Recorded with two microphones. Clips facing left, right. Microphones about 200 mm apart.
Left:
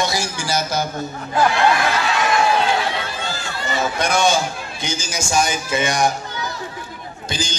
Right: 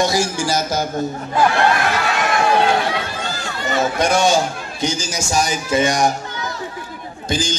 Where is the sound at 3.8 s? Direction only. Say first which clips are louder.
Right 3 dB; 40° right (ahead or behind).